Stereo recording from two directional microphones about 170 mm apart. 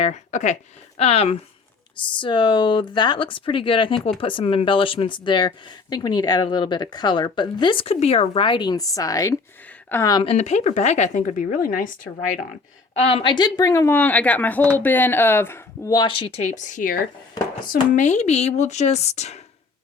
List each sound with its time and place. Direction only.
0.0 s speech: 45° left (ahead or behind); by 10.3 s 25° left (ahead or behind)
10.3 s a woman's voice: 40° left (ahead or behind)
12.9 s speech: 35° left (ahead or behind)